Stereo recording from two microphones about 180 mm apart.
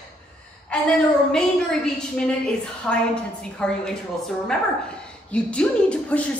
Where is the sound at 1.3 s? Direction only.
5° left (ahead or behind).